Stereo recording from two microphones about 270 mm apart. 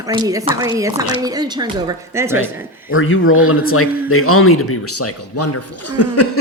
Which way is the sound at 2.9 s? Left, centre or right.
Left.